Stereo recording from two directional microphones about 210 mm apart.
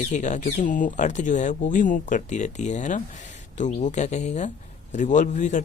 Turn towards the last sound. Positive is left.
turn(degrees=35)  # may be behind; listen again after turning